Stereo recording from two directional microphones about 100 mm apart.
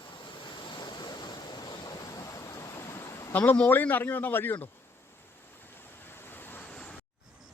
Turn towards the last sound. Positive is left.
turn(degrees=15)  # may be behind; listen again after turning